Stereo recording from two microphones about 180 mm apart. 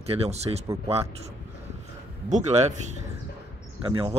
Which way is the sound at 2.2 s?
40° right (ahead or behind).